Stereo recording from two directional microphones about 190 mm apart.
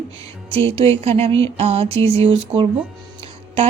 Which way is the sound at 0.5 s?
30° right (ahead or behind).